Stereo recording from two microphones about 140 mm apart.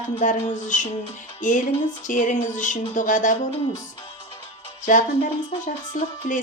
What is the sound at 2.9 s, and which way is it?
Music, 65° left (ahead or behind).